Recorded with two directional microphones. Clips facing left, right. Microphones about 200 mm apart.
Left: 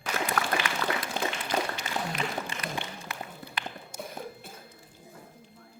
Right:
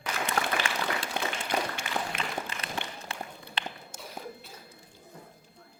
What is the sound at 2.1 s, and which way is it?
Music, 55° right (ahead or behind).